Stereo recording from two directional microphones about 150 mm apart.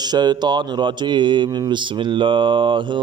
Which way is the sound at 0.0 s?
30° right (ahead or behind).